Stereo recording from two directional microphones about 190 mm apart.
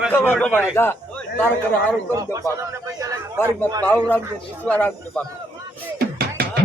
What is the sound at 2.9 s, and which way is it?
Speech, 20° right (ahead or behind).